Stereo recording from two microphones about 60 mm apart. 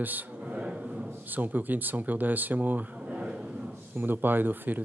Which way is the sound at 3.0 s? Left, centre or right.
Centre.